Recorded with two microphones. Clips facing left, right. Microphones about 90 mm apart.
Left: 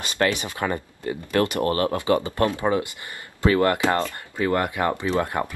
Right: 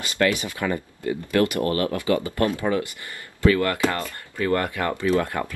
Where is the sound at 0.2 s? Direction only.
45° left (ahead or behind).